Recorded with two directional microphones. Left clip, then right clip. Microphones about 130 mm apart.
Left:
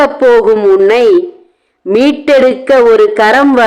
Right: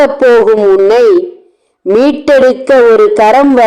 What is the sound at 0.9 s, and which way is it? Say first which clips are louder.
A man's voice: right 1 dB; 25° right (ahead or behind).